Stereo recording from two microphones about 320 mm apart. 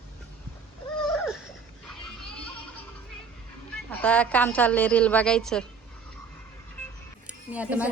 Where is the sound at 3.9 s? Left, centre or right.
Centre.